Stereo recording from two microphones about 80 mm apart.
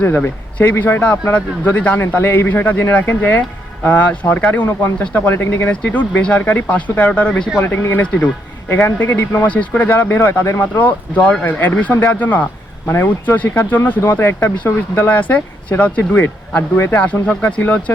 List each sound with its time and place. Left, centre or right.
0.2 s speech: left
7.6 s speech: left
10.6 s speech: left
16.9 s speech: centre